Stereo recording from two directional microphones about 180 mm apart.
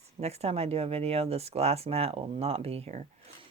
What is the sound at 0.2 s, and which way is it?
Speech, 35° right (ahead or behind).